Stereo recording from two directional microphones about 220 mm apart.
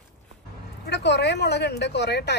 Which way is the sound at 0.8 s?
50° left (ahead or behind).